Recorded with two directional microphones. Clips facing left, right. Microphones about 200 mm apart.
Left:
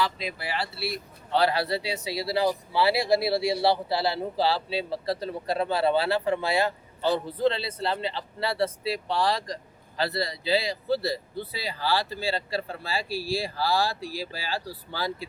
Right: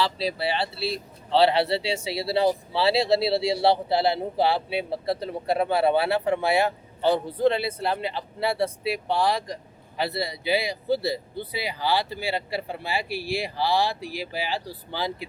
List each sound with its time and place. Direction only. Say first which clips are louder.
0.0 s speech: right 4 dB; 30° right (ahead or behind)